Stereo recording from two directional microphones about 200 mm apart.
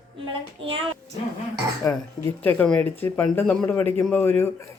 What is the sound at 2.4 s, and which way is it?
Speech, 5° left (ahead or behind).